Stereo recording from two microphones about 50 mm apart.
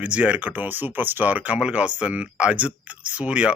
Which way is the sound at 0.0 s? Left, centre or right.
Right.